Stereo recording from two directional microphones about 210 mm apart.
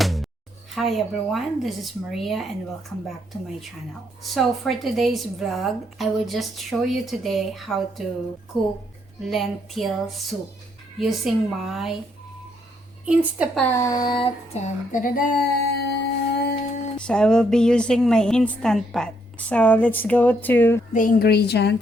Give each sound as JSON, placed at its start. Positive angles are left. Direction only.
{"t": 0.0, "sound": "music", "side_deg": 0}
{"t": 0.8, "sound": "a woman's voice", "side_deg": 0}
{"t": 4.2, "sound": "a woman's voice", "side_deg": 0}
{"t": 13.6, "sound": "a sound", "side_deg": 10}
{"t": 14.9, "sound": "a sound", "side_deg": 40}
{"t": 17.0, "sound": "a woman's voice", "side_deg": 5}
{"t": 20.9, "sound": "a woman's voice", "side_deg": 40}